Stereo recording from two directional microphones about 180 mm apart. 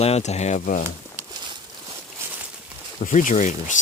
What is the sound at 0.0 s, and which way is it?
Speech, 35° left (ahead or behind).